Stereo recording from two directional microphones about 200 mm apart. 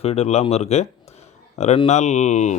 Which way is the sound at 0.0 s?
30° left (ahead or behind).